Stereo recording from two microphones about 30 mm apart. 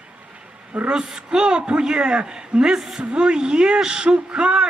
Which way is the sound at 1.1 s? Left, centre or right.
Right.